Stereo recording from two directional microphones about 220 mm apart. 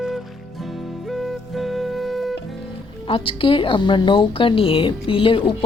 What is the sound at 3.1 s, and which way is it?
Speech, 25° left (ahead or behind).